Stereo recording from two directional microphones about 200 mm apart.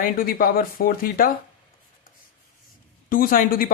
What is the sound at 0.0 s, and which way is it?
Speech, 45° left (ahead or behind).